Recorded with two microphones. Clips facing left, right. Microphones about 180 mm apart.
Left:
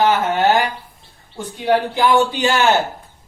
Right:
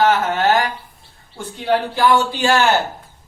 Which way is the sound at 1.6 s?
20° left (ahead or behind).